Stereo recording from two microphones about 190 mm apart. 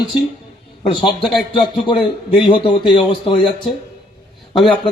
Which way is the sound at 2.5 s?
25° left (ahead or behind).